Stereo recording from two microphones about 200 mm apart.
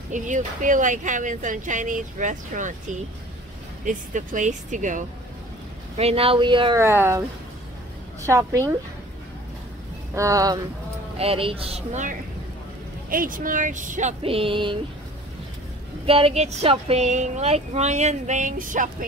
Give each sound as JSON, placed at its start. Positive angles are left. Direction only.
{"t": 0.1, "sound": "speech", "side_deg": -40}
{"t": 3.8, "sound": "speech", "side_deg": -40}
{"t": 6.8, "sound": "a woman's voice", "side_deg": -10}
{"t": 10.1, "sound": "a woman's voice", "side_deg": -15}
{"t": 11.1, "sound": "speech", "side_deg": -30}
{"t": 16.1, "sound": "speech", "side_deg": -30}